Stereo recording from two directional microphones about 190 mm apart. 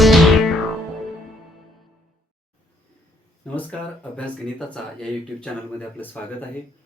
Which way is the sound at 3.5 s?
10° left (ahead or behind).